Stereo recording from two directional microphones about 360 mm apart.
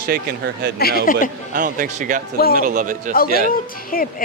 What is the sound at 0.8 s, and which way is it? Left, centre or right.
Speech, left.